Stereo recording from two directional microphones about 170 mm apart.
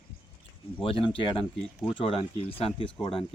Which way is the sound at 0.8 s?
30° left (ahead or behind).